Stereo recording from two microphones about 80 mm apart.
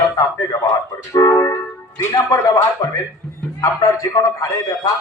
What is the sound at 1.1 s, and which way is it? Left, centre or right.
Speech, left.